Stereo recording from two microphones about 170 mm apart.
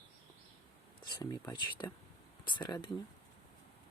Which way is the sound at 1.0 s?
25° left (ahead or behind).